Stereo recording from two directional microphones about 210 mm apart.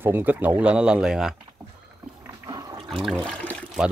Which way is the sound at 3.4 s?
Centre (ahead or behind).